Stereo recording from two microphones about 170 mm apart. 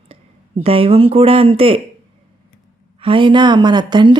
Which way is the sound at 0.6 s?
35° right (ahead or behind).